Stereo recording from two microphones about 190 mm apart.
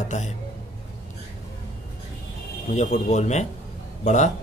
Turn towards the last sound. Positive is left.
turn(degrees=40)  # may be behind; listen again after turning